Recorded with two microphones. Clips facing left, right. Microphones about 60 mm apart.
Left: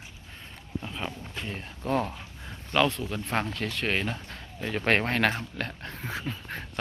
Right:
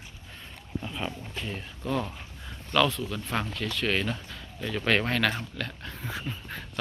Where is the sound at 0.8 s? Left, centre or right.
Centre.